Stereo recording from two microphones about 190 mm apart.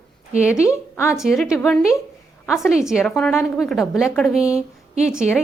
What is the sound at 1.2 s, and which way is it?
A woman's voice, centre (ahead or behind).